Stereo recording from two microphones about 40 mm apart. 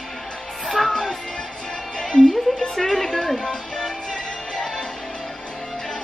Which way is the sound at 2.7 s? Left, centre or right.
Centre.